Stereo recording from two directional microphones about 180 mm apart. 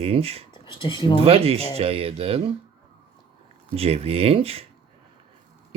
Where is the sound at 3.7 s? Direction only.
35° right (ahead or behind).